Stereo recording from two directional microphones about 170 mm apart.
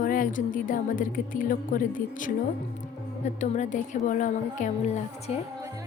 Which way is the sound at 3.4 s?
45° left (ahead or behind).